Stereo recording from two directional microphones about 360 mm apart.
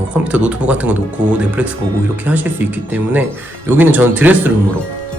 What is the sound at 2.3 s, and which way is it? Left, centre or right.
A man's voice, centre.